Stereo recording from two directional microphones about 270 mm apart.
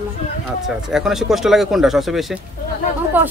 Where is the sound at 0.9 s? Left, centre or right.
Centre.